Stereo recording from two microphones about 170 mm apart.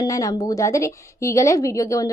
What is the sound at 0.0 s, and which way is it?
A woman's voice, 20° left (ahead or behind).